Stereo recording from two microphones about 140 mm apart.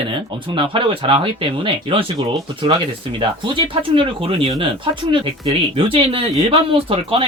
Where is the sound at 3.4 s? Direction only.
35° right (ahead or behind).